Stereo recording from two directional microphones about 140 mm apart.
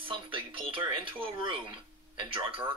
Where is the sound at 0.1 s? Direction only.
40° right (ahead or behind).